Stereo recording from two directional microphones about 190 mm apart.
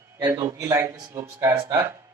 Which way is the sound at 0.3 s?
15° right (ahead or behind).